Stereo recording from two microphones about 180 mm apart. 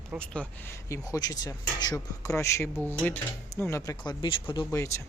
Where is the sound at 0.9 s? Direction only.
20° left (ahead or behind).